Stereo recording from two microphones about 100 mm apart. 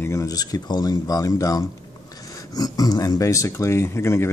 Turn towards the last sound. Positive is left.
turn(degrees=25)  # may be behind; listen again after turning